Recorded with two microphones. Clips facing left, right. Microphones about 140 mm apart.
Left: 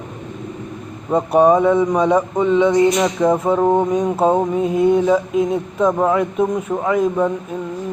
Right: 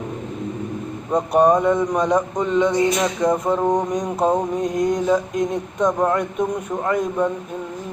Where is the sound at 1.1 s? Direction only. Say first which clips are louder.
Left 3 dB; 5° left (ahead or behind).